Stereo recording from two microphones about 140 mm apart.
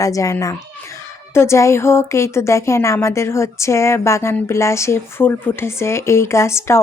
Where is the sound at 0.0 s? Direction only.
25° left (ahead or behind).